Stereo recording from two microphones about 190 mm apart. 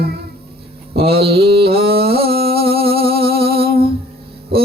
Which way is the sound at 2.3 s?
55° right (ahead or behind).